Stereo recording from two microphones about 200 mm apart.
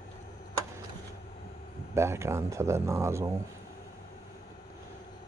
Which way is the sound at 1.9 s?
15° right (ahead or behind).